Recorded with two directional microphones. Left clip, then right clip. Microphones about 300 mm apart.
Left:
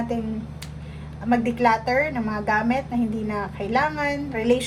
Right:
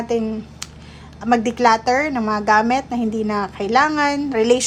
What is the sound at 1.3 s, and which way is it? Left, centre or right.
A woman's voice, centre.